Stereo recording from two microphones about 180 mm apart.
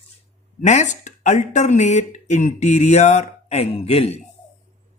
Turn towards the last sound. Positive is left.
turn(degrees=35)  # may be behind; listen again after turning